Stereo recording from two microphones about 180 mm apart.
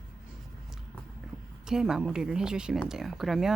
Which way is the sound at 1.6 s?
5° right (ahead or behind).